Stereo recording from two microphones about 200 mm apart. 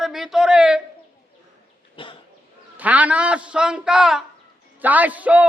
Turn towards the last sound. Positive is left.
turn(degrees=-5)  # may be behind; listen again after turning